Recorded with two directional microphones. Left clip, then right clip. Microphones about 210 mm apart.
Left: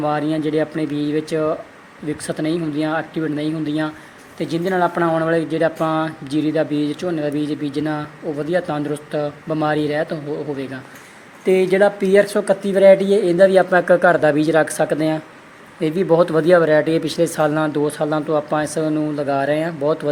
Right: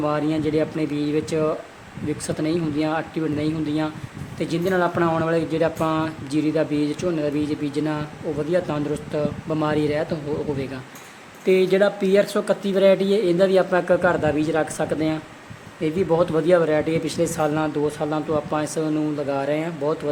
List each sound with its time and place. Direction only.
0.0 s speech: 5° left (ahead or behind)
11.4 s speech: 10° left (ahead or behind)